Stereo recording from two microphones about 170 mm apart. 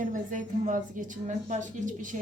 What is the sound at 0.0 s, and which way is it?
A woman's voice, 50° right (ahead or behind).